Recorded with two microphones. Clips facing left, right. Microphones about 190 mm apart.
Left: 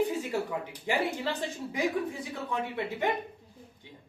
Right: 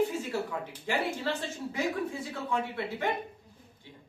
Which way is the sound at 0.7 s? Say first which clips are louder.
Left 1 dB; 15° left (ahead or behind).